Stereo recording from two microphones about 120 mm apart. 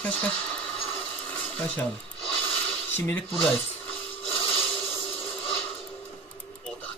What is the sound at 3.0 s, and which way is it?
Speech, 15° left (ahead or behind).